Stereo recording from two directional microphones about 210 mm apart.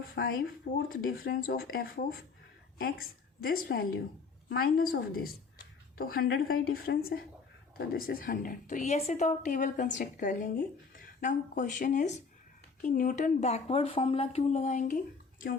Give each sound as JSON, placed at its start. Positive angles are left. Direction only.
{"t": 0.2, "sound": "speech", "side_deg": 55}
{"t": 0.9, "sound": "a woman's voice", "side_deg": 45}
{"t": 6.0, "sound": "a woman's voice", "side_deg": 45}